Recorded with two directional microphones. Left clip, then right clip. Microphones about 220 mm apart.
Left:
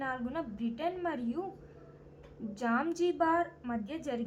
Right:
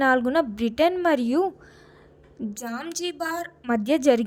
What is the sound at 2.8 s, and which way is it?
A woman's voice, 40° right (ahead or behind).